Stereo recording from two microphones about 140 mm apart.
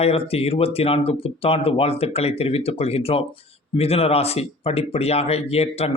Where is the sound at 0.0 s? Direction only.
45° left (ahead or behind).